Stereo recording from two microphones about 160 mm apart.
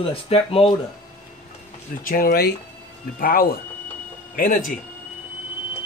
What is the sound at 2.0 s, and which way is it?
Speech, 65° left (ahead or behind).